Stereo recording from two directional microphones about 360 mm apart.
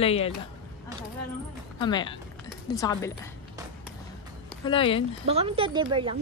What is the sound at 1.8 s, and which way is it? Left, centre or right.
Speech, centre.